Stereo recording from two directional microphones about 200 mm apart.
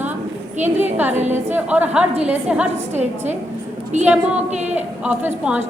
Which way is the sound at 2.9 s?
35° right (ahead or behind).